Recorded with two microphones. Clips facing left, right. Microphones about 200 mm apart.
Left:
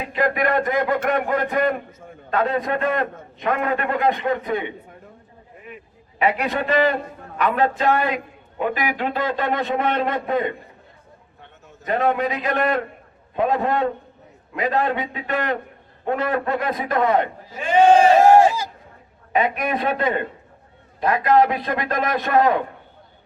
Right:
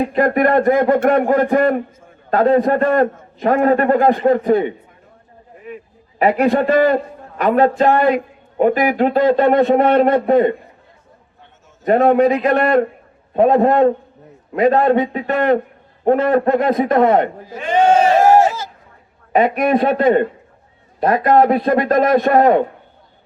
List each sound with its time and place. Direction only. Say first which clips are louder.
0.0 s a man's voice: right 7 dB; 45° right (ahead or behind)
6.1 s a man's voice: right 8 dB; 45° right (ahead or behind)
11.9 s a man's voice: right 9 dB; 40° right (ahead or behind)
18.4 s speech: even; 15° left (ahead or behind)
19.3 s a man's voice: right 7 dB; 45° right (ahead or behind)